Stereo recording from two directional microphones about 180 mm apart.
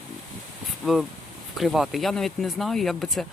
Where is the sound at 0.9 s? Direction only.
Centre (ahead or behind).